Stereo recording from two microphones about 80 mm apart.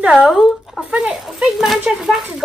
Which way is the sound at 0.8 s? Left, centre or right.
Centre.